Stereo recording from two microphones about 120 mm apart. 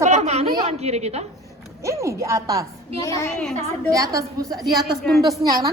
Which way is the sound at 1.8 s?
25° right (ahead or behind).